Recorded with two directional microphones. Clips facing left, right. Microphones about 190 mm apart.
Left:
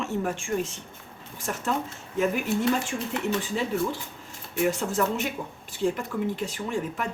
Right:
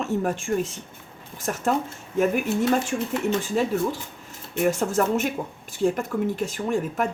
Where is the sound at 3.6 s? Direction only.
45° right (ahead or behind).